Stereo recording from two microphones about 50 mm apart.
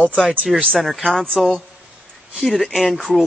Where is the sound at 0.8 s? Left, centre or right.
Centre.